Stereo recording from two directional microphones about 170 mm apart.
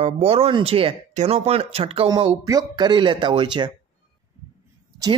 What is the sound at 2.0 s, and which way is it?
Speech, 25° right (ahead or behind).